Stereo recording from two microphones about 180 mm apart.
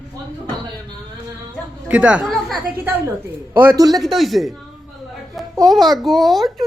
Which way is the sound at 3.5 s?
15° right (ahead or behind).